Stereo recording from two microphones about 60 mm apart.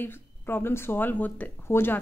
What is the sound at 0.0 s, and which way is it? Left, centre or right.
Speech, left.